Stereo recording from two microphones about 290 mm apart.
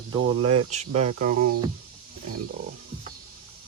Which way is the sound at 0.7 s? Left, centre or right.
Right.